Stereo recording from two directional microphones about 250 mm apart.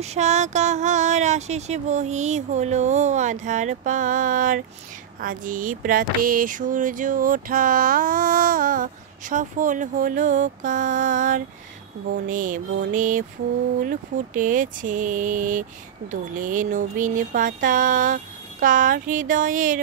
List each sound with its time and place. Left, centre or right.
0.0 s speech: right
5.2 s music: right